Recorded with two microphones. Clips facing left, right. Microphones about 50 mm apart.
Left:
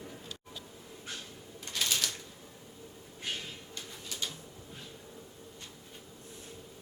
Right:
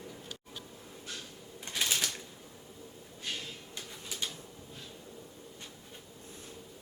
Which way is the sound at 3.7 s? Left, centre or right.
Centre.